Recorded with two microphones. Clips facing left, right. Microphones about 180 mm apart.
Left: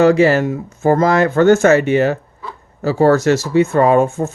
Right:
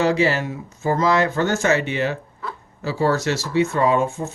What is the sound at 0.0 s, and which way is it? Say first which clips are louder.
Speech: left 8 dB; 50° left (ahead or behind).